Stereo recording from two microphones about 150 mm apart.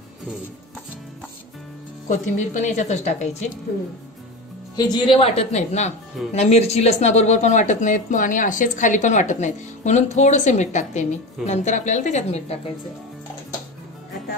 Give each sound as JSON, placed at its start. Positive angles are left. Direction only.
{"t": 2.0, "sound": "speech", "side_deg": 55}
{"t": 4.7, "sound": "speech", "side_deg": 30}